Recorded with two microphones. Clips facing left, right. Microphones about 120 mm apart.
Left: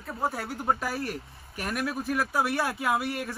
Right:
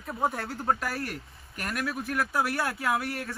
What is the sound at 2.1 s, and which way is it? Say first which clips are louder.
Speech: left 1 dB; 20° left (ahead or behind).